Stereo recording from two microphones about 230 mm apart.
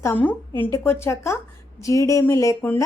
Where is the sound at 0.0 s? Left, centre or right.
Centre.